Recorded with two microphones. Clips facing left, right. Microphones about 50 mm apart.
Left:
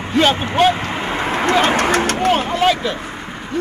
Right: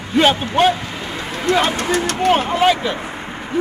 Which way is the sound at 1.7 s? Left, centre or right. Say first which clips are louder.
Left 4 dB; left.